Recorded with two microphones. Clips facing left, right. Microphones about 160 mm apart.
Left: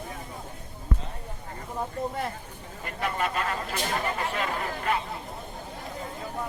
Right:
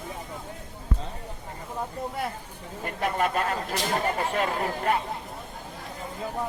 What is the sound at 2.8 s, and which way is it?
Speech, 45° right (ahead or behind).